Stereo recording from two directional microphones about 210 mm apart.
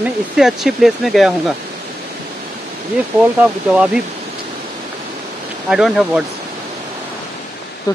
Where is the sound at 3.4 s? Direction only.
5° right (ahead or behind).